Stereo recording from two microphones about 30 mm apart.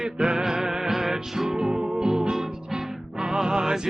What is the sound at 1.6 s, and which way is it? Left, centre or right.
Music, right.